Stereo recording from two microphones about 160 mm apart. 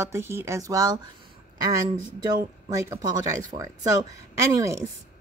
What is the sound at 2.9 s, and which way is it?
Speech, 20° right (ahead or behind).